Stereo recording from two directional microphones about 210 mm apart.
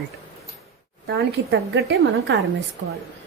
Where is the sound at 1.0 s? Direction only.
60° right (ahead or behind).